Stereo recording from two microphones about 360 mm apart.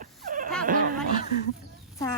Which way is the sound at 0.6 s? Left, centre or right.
Right.